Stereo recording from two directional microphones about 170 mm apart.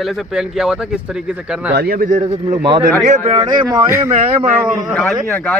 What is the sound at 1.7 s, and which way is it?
Speech, 65° right (ahead or behind).